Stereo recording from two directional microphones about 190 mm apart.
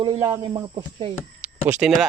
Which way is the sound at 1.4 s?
5° right (ahead or behind).